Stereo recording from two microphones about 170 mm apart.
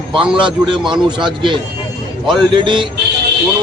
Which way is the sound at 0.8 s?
25° right (ahead or behind).